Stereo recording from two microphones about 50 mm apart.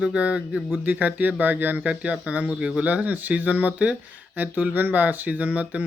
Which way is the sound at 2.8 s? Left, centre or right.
Right.